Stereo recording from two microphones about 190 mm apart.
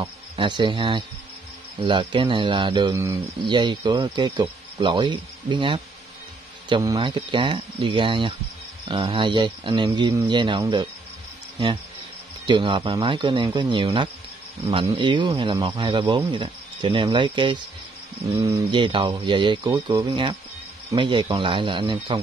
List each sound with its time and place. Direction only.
0.0 s speech: 25° right (ahead or behind)
12.4 s speech: 25° right (ahead or behind)